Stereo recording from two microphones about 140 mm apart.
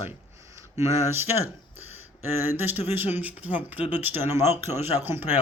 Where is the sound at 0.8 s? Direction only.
15° right (ahead or behind).